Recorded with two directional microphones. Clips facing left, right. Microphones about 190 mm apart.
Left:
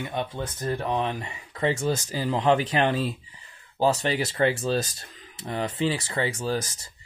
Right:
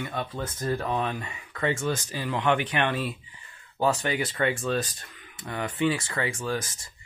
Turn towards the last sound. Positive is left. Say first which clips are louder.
# left 3 dB
turn(degrees=35)  # may be behind; listen again after turning